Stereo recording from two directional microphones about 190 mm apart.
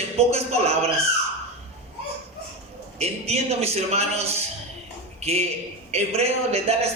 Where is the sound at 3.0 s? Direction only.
35° right (ahead or behind).